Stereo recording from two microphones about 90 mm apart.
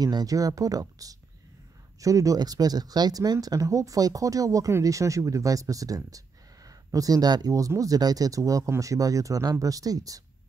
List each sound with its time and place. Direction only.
0.0 s speech: 45° right (ahead or behind)